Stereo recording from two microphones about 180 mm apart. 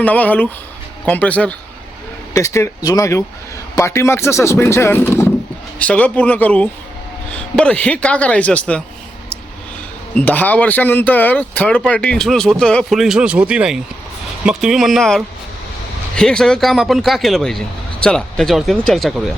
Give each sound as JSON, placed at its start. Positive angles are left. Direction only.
{"t": 0.0, "sound": "speech", "side_deg": 10}
{"t": 10.2, "sound": "speech", "side_deg": 10}